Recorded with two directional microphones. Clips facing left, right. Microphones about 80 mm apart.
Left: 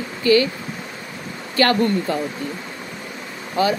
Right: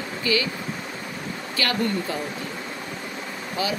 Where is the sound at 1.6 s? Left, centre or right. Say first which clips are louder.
Left 10 dB; left.